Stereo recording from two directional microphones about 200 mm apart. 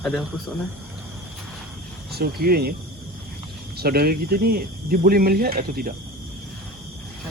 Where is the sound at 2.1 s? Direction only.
50° right (ahead or behind).